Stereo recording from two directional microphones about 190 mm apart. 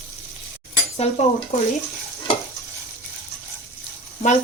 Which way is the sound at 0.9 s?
35° left (ahead or behind).